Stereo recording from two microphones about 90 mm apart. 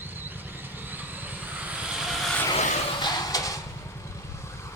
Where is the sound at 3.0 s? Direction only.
45° left (ahead or behind).